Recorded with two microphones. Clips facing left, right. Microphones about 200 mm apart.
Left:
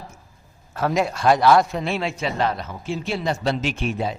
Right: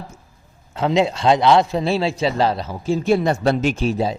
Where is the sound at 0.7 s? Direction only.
20° right (ahead or behind).